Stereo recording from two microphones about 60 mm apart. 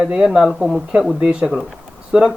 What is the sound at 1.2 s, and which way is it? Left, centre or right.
Speech, centre.